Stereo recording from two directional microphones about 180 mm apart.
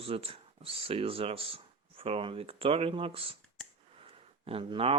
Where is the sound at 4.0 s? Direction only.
30° right (ahead or behind).